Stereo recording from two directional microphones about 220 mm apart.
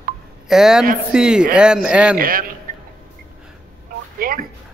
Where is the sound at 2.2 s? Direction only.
40° right (ahead or behind).